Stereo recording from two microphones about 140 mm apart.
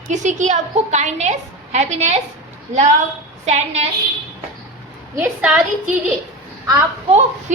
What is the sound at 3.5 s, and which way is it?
Speech, 50° right (ahead or behind).